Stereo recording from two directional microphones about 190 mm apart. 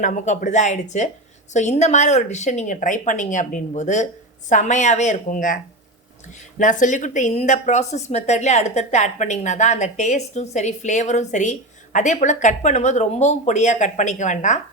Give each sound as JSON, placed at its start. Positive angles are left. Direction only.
{"t": 0.0, "sound": "a woman's voice", "side_deg": 40}
{"t": 6.6, "sound": "a woman's voice", "side_deg": 40}